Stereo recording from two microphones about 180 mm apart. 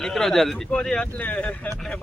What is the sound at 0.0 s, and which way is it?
Speech, centre (ahead or behind).